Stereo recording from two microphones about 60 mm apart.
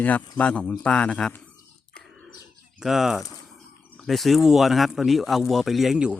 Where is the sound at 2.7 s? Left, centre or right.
Centre.